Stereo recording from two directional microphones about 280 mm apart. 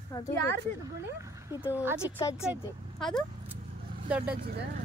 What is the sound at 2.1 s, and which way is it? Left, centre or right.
Speech, centre.